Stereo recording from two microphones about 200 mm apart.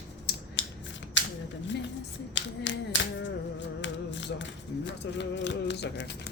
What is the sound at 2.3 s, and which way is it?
Clapping, 65° left (ahead or behind).